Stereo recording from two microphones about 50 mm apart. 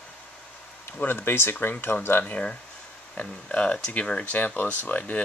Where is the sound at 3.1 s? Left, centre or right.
Left.